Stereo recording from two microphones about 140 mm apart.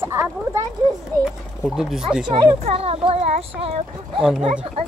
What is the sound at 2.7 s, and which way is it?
Speech, 45° right (ahead or behind).